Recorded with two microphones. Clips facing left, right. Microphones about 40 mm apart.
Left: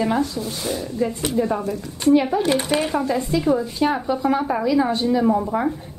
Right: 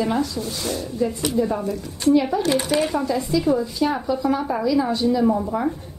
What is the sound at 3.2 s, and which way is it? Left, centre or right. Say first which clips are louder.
A woman's voice: even; left.